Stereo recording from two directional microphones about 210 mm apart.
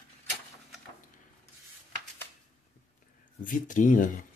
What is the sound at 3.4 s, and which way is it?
Speech, 40° left (ahead or behind).